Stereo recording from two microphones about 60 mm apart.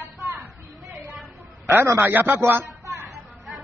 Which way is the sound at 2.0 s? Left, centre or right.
Right.